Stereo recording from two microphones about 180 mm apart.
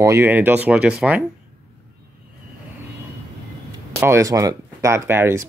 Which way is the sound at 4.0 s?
15° right (ahead or behind).